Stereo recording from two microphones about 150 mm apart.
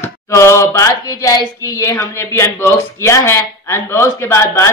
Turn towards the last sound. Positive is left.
turn(degrees=20)  # may be behind; listen again after turning